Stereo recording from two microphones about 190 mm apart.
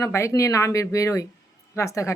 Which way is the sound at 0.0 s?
15° left (ahead or behind).